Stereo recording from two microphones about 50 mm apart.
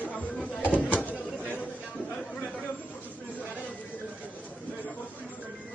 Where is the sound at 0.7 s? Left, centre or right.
Left.